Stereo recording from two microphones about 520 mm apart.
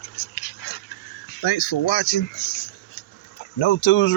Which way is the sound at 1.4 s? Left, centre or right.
Left.